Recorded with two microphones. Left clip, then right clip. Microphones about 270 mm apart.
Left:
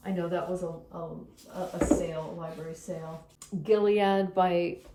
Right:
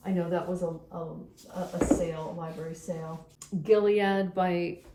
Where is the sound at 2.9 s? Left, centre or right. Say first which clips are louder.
Right 1 dB; centre.